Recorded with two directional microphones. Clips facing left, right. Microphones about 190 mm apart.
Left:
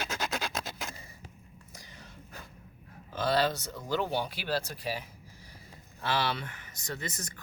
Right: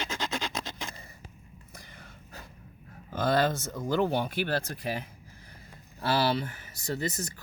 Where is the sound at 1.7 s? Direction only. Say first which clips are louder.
Right 1 dB; 55° right (ahead or behind).